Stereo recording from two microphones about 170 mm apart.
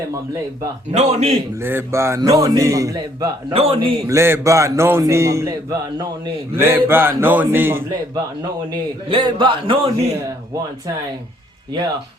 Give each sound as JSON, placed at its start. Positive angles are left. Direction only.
{"t": 0.9, "sound": "a man's voice", "side_deg": -40}
{"t": 1.6, "sound": "a man's voice", "side_deg": -15}
{"t": 3.5, "sound": "a man's voice", "side_deg": -35}
{"t": 4.0, "sound": "a man's voice", "side_deg": -15}
{"t": 6.6, "sound": "a man's voice", "side_deg": -15}
{"t": 9.0, "sound": "a man's voice", "side_deg": -30}